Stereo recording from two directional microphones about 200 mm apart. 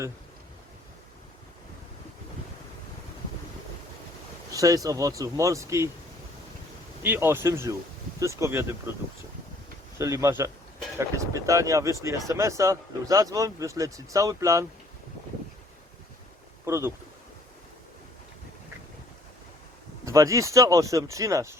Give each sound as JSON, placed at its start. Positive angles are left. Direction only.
{"t": 4.5, "sound": "speech", "side_deg": -15}
{"t": 7.0, "sound": "speech", "side_deg": -10}
{"t": 10.0, "sound": "speech", "side_deg": -15}
{"t": 16.6, "sound": "speech", "side_deg": -15}
{"t": 20.1, "sound": "speech", "side_deg": -15}